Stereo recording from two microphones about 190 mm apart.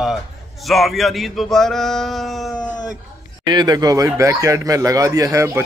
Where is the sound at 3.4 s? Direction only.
20° right (ahead or behind).